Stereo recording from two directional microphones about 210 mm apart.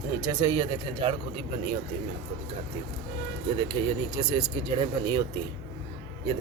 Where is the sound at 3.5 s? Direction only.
20° right (ahead or behind).